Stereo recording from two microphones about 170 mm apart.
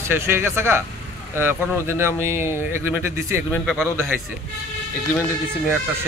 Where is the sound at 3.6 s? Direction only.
Centre (ahead or behind).